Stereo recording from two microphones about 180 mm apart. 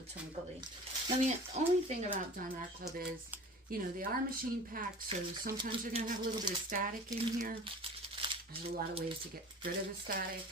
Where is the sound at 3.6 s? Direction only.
55° right (ahead or behind).